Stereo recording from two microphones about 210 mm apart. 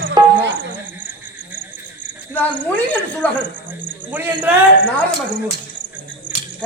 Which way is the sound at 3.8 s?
10° right (ahead or behind).